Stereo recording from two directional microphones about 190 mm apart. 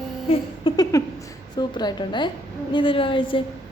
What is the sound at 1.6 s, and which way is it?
A woman's voice, 25° left (ahead or behind).